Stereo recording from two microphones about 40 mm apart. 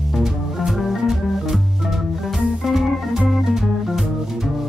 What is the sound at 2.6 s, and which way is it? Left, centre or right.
Organ, centre.